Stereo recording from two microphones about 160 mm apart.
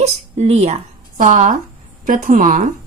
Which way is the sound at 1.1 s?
55° right (ahead or behind).